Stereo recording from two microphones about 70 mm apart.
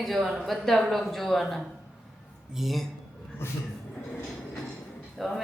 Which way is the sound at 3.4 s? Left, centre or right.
Left.